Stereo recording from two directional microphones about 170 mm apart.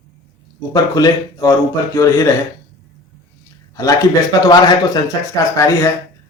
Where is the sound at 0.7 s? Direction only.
20° left (ahead or behind).